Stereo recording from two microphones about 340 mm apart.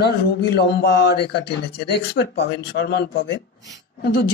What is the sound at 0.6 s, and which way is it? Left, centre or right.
Speech, left.